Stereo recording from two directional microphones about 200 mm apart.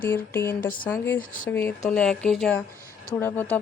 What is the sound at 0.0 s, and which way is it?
Speech, 10° left (ahead or behind).